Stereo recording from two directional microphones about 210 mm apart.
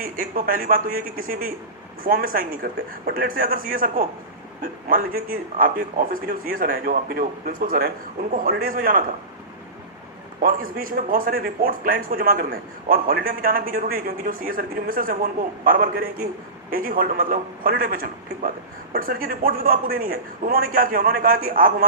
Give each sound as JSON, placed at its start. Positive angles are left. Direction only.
{"t": 0.0, "sound": "a man's voice", "side_deg": -40}
{"t": 10.4, "sound": "a man's voice", "side_deg": -40}